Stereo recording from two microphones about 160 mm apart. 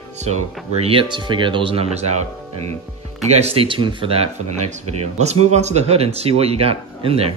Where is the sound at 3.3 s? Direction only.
40° right (ahead or behind).